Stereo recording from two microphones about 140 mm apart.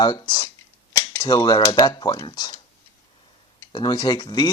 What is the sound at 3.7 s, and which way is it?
Speech, 30° left (ahead or behind).